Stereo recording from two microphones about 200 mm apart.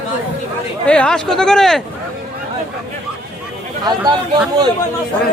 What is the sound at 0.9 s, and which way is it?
Speech, 5° left (ahead or behind).